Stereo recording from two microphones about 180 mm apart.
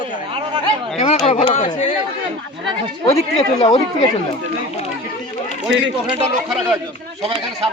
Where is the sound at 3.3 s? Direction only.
30° left (ahead or behind).